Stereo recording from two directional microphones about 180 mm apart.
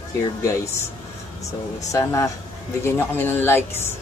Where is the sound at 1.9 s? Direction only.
15° left (ahead or behind).